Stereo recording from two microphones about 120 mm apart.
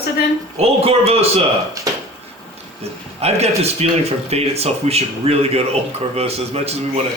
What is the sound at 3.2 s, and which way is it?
Speech, 60° right (ahead or behind).